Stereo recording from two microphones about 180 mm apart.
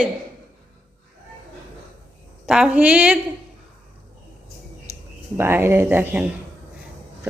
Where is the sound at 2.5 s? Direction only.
5° right (ahead or behind).